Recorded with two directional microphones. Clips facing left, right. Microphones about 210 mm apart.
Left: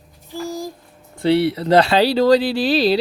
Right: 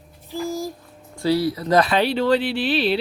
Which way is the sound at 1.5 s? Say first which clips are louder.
Left 4 dB; 30° left (ahead or behind).